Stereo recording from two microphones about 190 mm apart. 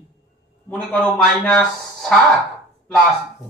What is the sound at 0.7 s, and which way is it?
Speech, 5° left (ahead or behind).